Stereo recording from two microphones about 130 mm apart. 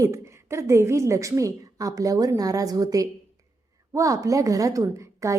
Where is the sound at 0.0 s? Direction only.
25° right (ahead or behind).